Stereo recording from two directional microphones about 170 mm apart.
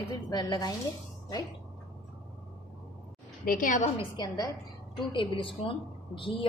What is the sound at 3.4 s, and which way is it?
Speech, 55° left (ahead or behind).